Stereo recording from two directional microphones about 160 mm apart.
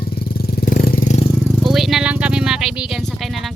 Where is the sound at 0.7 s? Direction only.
60° left (ahead or behind).